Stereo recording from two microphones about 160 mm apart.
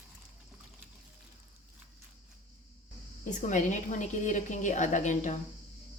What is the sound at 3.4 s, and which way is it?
A woman's voice, 50° left (ahead or behind).